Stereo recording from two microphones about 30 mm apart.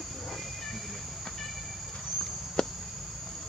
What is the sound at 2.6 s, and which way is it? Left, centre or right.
Cricket, left.